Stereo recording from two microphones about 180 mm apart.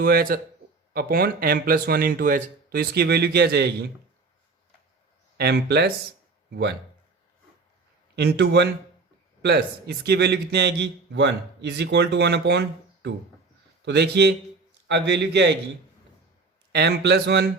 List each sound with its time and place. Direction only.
0.0 s speech: 55° right (ahead or behind)
5.4 s speech: 65° right (ahead or behind)
8.1 s a man's voice: 70° right (ahead or behind)
16.7 s speech: 65° right (ahead or behind)